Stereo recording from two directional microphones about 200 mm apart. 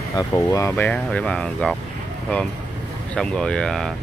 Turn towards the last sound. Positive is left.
turn(degrees=5)  # may be behind; listen again after turning